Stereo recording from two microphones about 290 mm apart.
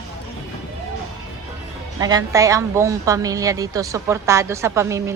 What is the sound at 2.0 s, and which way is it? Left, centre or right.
Speech, centre.